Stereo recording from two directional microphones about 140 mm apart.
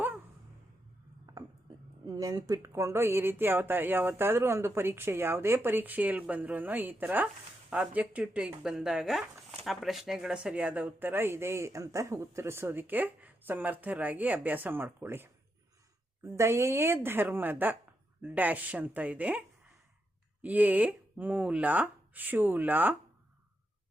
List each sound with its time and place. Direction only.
2.0 s speech: 25° right (ahead or behind)